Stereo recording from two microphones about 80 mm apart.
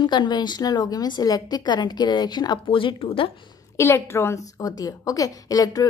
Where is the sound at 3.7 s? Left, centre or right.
Left.